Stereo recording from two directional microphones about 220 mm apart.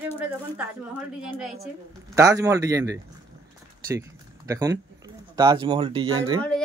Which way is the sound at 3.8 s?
15° right (ahead or behind).